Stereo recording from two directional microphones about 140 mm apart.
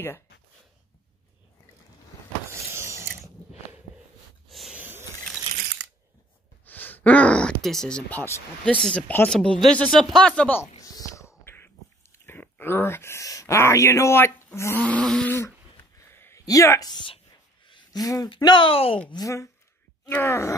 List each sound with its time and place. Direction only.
2.7 s a sound: 20° right (ahead or behind)
4.5 s snort: centre (ahead or behind)
4.7 s vehicle: 15° right (ahead or behind)
6.6 s speech: 15° left (ahead or behind)
10.8 s whispering: 25° left (ahead or behind)
12.3 s speech: 15° left (ahead or behind); by 17.2 s 35° left (ahead or behind)
17.6 s a sound: 30° left (ahead or behind)
18.3 s speech: 35° left (ahead or behind)
19.0 s a woman's voice: 25° left (ahead or behind)